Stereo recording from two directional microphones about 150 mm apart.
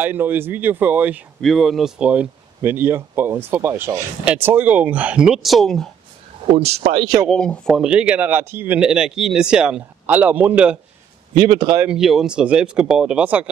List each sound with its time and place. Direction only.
0.0 s speech: 15° right (ahead or behind)
1.4 s speech: centre (ahead or behind)
6.5 s speech: 45° right (ahead or behind)
7.2 s speech: 5° left (ahead or behind)
11.3 s speech: 35° right (ahead or behind)
11.8 s speech: 5° right (ahead or behind)